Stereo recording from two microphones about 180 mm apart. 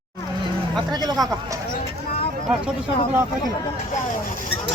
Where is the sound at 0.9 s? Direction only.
20° right (ahead or behind).